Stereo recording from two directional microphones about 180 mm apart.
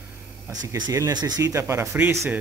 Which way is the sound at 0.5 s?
20° right (ahead or behind).